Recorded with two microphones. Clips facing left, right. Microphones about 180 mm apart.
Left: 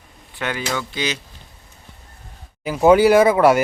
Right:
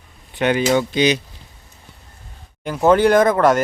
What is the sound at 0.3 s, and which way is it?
Speech, 20° right (ahead or behind).